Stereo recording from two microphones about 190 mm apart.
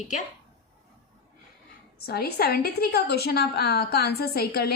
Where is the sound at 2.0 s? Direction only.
55° left (ahead or behind).